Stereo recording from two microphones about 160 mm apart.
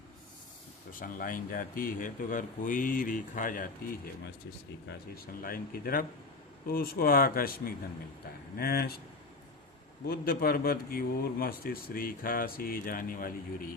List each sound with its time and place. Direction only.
0.9 s speech: 60° left (ahead or behind)
4.9 s speech: 70° left (ahead or behind)
10.1 s speech: 65° left (ahead or behind)